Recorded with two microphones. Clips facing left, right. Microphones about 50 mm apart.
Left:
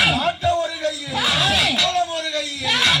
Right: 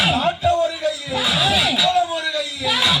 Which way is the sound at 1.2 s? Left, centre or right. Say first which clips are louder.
Even; left.